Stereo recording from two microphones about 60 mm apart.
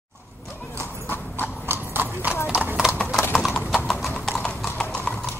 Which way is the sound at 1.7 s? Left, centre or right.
Right.